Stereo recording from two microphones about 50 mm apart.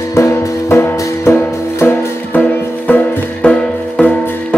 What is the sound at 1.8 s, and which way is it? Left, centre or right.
Music, left.